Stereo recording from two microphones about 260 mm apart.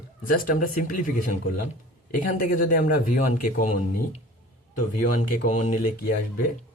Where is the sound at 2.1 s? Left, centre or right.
Left.